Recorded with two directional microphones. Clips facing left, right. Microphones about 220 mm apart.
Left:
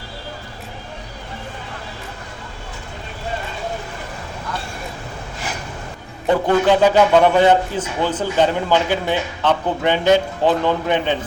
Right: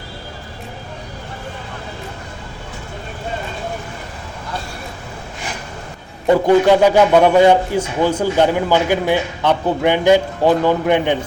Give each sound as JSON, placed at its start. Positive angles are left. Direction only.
{"t": 6.4, "sound": "speech", "side_deg": -10}